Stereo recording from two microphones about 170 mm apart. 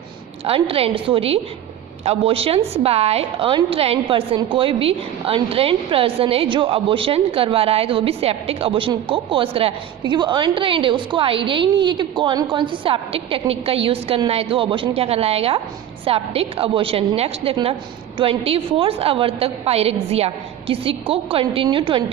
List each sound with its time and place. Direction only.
0.4 s a woman's voice: 35° right (ahead or behind)